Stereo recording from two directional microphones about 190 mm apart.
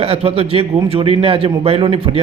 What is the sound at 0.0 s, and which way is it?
A man's voice, 30° right (ahead or behind).